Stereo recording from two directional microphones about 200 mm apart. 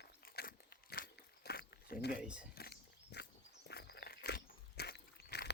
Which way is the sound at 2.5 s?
50° left (ahead or behind).